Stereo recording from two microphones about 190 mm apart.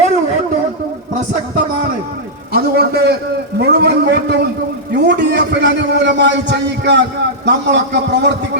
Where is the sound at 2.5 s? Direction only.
55° right (ahead or behind).